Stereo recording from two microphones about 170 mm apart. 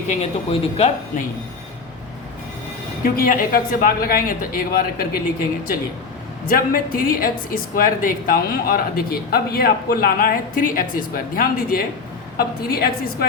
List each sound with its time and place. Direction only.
0.1 s speech: 40° left (ahead or behind)
3.0 s a woman's voice: 55° left (ahead or behind)
6.5 s a woman's voice: 55° left (ahead or behind)